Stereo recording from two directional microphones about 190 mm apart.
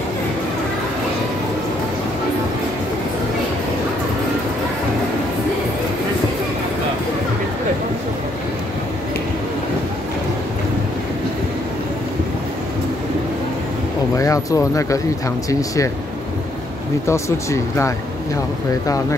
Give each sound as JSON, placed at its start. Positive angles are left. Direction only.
{"t": 14.1, "sound": "speech", "side_deg": 15}
{"t": 17.1, "sound": "speech", "side_deg": 15}